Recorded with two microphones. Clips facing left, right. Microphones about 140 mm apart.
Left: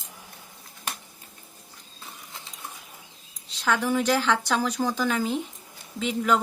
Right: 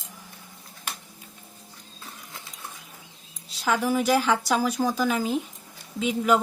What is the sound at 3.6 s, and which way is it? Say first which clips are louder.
Speech: right 1 dB; 5° right (ahead or behind).